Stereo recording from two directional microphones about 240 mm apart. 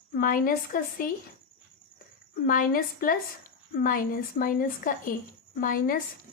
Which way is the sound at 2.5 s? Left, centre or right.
Left.